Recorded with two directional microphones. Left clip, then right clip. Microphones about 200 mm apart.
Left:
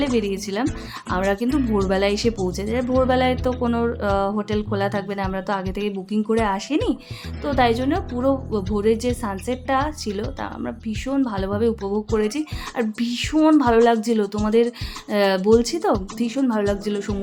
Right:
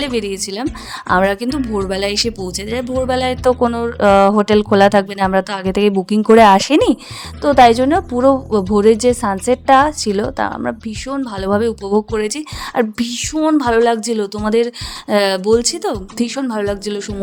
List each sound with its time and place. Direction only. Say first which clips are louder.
0.0 s speech: right 3 dB; 40° right (ahead or behind)